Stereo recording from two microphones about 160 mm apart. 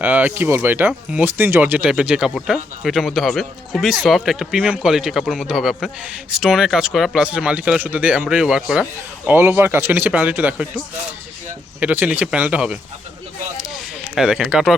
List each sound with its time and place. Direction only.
0.0 s speech: 10° right (ahead or behind)
11.8 s speech: 10° right (ahead or behind)
13.6 s a sound: centre (ahead or behind)